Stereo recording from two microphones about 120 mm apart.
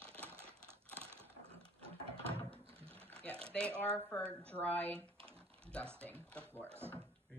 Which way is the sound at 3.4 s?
10° left (ahead or behind).